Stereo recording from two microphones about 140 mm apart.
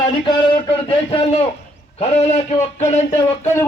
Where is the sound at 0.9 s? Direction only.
40° left (ahead or behind).